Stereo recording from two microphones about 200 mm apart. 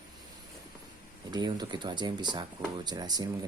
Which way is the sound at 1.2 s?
20° right (ahead or behind).